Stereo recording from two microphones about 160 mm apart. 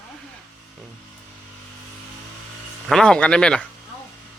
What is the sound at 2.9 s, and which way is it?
Speech, 5° left (ahead or behind).